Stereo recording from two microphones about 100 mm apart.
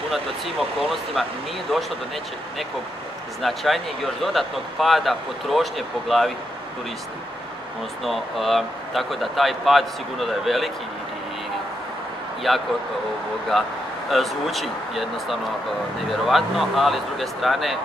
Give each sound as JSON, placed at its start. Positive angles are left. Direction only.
{"t": 0.1, "sound": "speech", "side_deg": 0}
{"t": 3.4, "sound": "speech", "side_deg": 0}
{"t": 8.0, "sound": "speech", "side_deg": 0}
{"t": 12.5, "sound": "speech", "side_deg": 0}
{"t": 14.1, "sound": "speech", "side_deg": 0}